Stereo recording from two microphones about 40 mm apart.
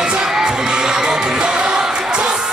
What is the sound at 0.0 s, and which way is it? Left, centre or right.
Music, centre.